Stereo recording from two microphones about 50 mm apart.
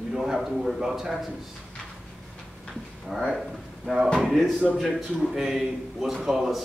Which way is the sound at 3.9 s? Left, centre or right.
Centre.